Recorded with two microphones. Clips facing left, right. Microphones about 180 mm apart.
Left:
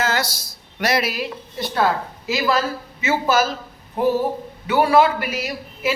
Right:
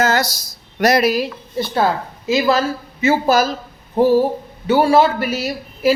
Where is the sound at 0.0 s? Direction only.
40° right (ahead or behind).